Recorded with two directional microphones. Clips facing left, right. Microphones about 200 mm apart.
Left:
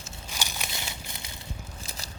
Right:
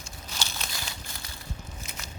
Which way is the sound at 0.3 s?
15° left (ahead or behind).